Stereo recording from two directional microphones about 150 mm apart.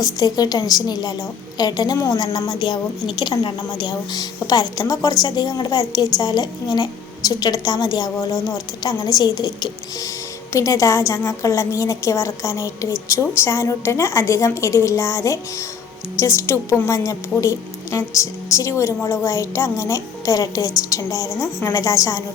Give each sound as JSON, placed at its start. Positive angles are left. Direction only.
{"t": 0.0, "sound": "a woman's voice", "side_deg": 25}